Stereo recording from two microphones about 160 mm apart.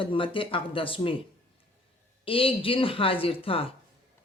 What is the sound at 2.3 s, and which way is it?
Speech, 35° left (ahead or behind).